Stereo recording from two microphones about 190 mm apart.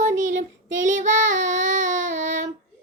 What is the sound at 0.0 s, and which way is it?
Child singing, 40° right (ahead or behind).